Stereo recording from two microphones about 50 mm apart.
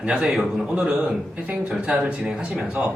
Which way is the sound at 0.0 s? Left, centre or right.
Centre.